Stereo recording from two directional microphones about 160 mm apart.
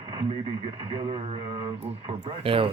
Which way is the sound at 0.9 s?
30° right (ahead or behind).